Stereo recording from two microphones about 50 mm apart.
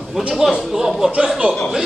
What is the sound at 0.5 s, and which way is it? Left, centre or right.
Speech, centre.